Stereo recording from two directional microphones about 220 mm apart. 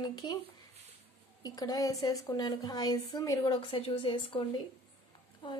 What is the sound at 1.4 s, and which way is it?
A woman's voice, 20° left (ahead or behind).